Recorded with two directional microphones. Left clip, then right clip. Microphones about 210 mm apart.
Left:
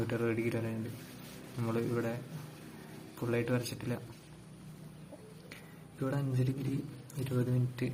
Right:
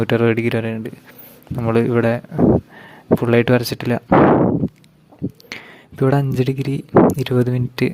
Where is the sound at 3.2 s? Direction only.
50° right (ahead or behind).